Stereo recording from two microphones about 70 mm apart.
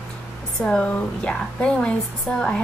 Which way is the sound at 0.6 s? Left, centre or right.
Centre.